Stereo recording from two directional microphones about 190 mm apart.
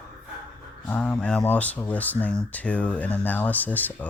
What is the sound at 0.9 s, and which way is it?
Speech, 5° left (ahead or behind).